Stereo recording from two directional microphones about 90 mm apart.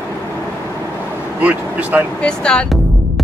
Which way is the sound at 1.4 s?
15° right (ahead or behind).